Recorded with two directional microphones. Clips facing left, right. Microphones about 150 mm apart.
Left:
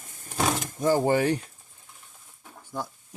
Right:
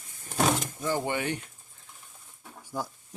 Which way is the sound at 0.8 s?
40° left (ahead or behind).